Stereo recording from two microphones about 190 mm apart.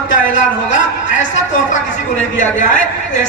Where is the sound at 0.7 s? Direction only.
40° left (ahead or behind).